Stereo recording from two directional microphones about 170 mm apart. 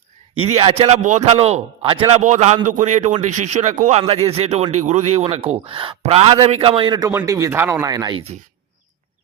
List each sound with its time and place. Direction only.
0.3 s a man's voice: 35° right (ahead or behind)
7.1 s speech: 15° right (ahead or behind)